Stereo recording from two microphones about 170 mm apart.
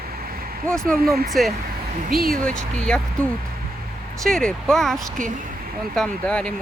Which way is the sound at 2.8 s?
5° left (ahead or behind).